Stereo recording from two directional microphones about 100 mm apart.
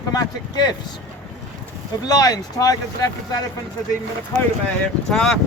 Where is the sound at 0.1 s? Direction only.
40° left (ahead or behind).